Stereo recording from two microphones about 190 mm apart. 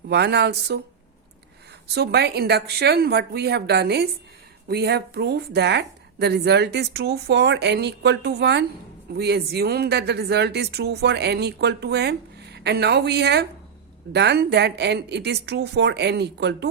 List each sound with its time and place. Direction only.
0.1 s speech: 60° right (ahead or behind)
1.9 s speech: 60° right (ahead or behind)